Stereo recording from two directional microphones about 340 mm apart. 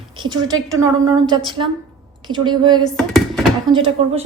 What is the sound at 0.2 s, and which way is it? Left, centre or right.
A woman's voice, centre.